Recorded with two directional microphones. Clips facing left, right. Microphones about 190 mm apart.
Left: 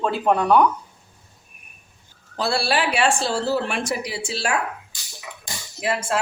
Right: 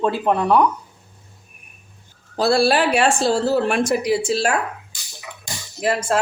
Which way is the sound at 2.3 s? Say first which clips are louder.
Right 6 dB; 40° right (ahead or behind).